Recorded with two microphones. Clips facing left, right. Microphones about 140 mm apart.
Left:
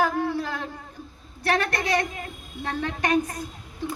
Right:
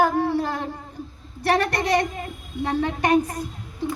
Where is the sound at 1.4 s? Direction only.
15° right (ahead or behind).